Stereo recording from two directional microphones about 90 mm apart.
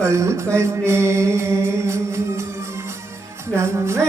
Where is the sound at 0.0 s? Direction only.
30° right (ahead or behind).